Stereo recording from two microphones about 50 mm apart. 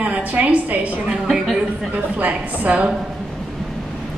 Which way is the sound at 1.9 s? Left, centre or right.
Right.